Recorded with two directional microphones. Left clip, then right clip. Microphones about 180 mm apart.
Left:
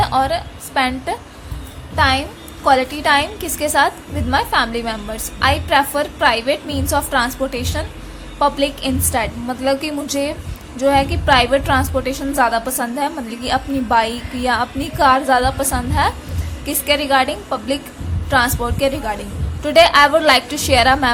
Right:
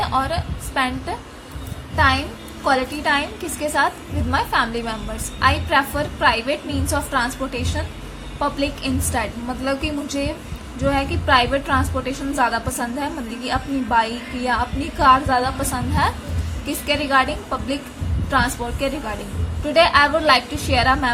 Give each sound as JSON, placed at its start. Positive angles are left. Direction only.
{"t": 0.0, "sound": "a woman's voice", "side_deg": 20}